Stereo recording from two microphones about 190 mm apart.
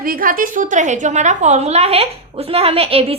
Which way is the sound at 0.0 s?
50° right (ahead or behind).